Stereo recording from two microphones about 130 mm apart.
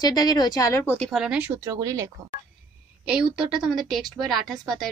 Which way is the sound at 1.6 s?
25° right (ahead or behind).